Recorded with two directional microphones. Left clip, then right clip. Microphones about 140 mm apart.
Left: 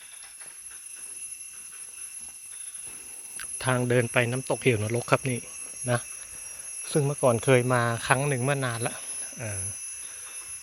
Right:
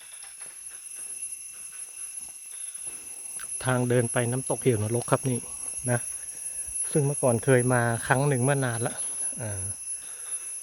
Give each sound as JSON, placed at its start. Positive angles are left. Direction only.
{"t": 3.3, "sound": "speech", "side_deg": -25}
{"t": 6.8, "sound": "speech", "side_deg": -25}
{"t": 9.2, "sound": "alarm clock", "side_deg": -25}